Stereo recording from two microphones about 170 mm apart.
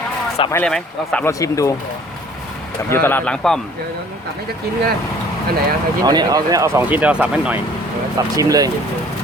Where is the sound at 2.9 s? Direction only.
10° left (ahead or behind).